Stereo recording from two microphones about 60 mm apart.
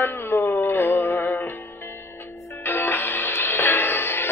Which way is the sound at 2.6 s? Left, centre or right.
Left.